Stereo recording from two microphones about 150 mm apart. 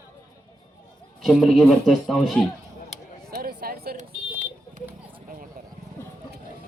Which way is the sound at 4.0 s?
60° right (ahead or behind).